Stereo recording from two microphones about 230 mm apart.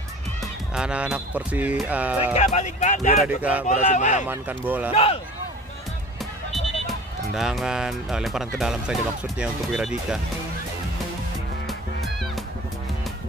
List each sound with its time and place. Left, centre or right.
0.4 s speech: centre
2.3 s speech: left
3.3 s speech: centre
3.6 s speech: left
4.3 s speech: centre
4.9 s speech: left
6.5 s speech: centre
11.6 s music: centre